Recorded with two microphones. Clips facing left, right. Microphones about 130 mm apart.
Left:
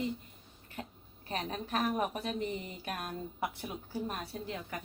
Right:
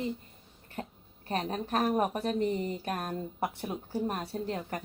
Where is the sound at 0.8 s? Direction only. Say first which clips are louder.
Right 4 dB; 40° right (ahead or behind).